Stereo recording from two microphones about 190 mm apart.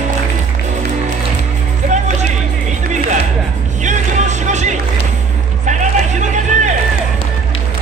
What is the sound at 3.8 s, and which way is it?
Music, 40° right (ahead or behind).